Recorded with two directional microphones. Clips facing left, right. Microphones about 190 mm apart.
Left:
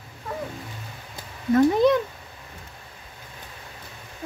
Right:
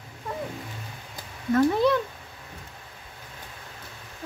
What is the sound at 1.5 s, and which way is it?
Speech, 20° left (ahead or behind).